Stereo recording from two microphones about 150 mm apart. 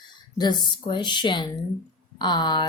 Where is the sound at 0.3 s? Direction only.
30° left (ahead or behind).